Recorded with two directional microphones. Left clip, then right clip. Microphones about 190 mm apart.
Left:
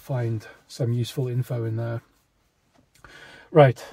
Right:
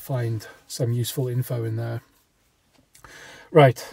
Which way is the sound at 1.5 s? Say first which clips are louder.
Even; 15° right (ahead or behind).